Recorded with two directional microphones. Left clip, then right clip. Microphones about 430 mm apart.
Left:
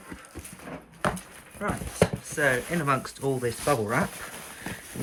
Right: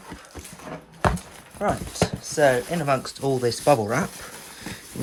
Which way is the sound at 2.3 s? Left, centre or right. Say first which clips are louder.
Right 7 dB; centre.